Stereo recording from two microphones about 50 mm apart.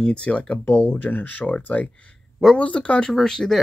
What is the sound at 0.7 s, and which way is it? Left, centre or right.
Speech, left.